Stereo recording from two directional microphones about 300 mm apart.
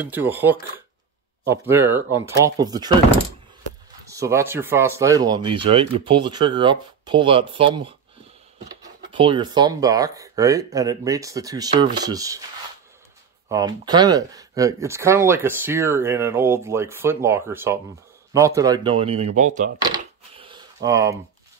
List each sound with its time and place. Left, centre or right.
0.0 s speech: centre
4.1 s speech: centre
13.5 s speech: centre
19.8 s a sound: centre